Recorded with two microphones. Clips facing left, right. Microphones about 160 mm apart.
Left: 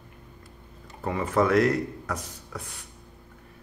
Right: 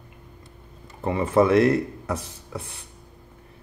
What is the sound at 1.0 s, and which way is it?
Speech, 25° right (ahead or behind).